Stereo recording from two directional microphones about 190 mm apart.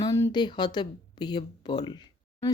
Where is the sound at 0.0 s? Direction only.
15° left (ahead or behind).